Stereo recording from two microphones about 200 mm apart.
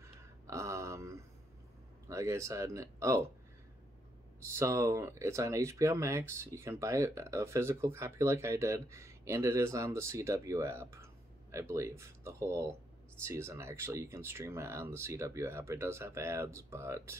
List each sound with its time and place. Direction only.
0.0 s a sound: 15° right (ahead or behind)
2.0 s speech: 15° right (ahead or behind)
4.5 s speech: 15° right (ahead or behind)